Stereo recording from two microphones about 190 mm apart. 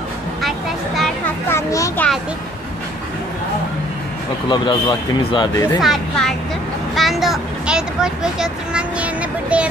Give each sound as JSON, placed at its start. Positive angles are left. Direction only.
{"t": 0.4, "sound": "a sound", "side_deg": 0}
{"t": 1.5, "sound": "a child's voice", "side_deg": 15}
{"t": 4.5, "sound": "speech", "side_deg": 25}
{"t": 5.8, "sound": "speech", "side_deg": 0}
{"t": 7.0, "sound": "vehicle", "side_deg": 0}